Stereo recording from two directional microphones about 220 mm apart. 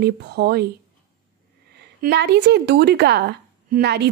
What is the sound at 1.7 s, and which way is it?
A woman's voice, 50° right (ahead or behind).